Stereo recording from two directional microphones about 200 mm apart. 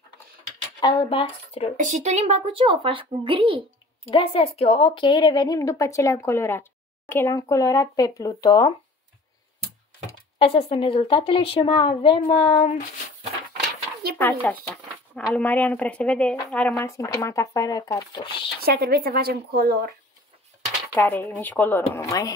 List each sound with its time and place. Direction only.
0.7 s a woman's voice: 25° left (ahead or behind)
1.8 s speech: 35° right (ahead or behind)
4.1 s a woman's voice: 25° left (ahead or behind)
10.4 s a woman's voice: 25° left (ahead or behind)
14.1 s a woman's voice: 10° left (ahead or behind)
18.6 s speech: 50° right (ahead or behind)
20.9 s a woman's voice: 10° left (ahead or behind)